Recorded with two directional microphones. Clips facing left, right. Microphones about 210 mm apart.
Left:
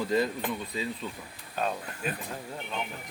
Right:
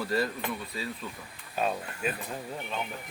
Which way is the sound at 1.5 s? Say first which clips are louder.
Right 1 dB; 5° right (ahead or behind).